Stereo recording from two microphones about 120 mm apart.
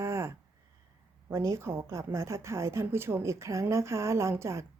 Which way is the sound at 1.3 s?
25° right (ahead or behind).